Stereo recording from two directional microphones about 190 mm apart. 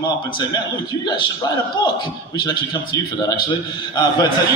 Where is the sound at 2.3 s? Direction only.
20° left (ahead or behind).